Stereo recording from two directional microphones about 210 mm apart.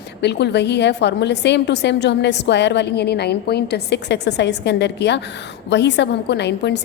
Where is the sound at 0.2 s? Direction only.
55° left (ahead or behind).